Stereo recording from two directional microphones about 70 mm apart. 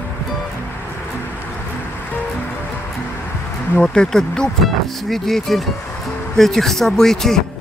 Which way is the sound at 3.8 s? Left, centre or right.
Centre.